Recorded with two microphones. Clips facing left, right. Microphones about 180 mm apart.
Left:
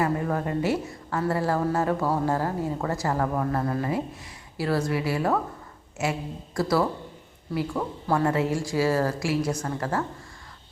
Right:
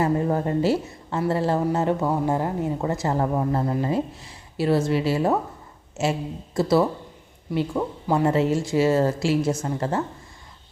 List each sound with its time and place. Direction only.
0.0 s speech: 25° right (ahead or behind)